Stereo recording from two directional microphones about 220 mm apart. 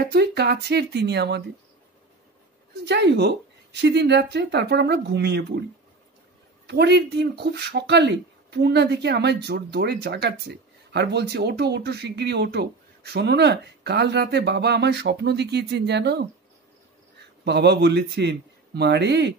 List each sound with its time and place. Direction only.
0.0 s speech: 45° right (ahead or behind)
2.8 s speech: 50° right (ahead or behind)
6.7 s speech: 50° right (ahead or behind)
17.5 s speech: 50° right (ahead or behind)